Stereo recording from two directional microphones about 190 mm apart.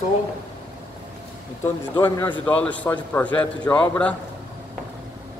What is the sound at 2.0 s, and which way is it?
A man's voice, 10° left (ahead or behind).